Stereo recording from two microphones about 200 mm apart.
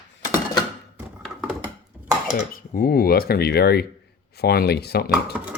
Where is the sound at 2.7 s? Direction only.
50° left (ahead or behind).